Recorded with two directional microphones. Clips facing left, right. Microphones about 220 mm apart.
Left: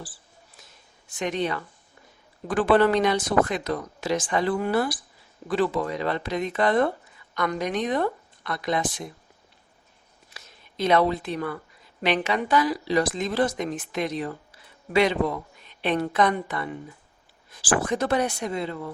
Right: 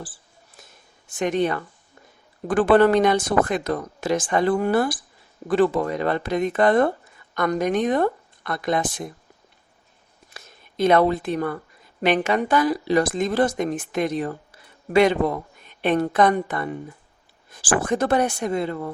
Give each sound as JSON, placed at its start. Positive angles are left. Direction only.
{"t": 1.1, "sound": "speech", "side_deg": -50}
{"t": 10.2, "sound": "speech", "side_deg": -50}